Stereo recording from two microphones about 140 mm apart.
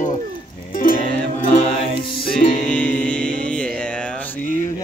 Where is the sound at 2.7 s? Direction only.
10° left (ahead or behind).